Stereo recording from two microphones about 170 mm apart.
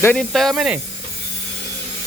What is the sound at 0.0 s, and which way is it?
Speech, 5° left (ahead or behind).